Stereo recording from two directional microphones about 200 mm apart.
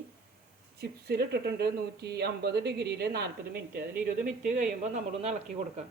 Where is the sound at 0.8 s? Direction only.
50° right (ahead or behind).